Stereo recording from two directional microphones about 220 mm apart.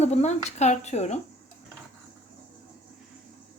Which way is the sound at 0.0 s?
30° left (ahead or behind).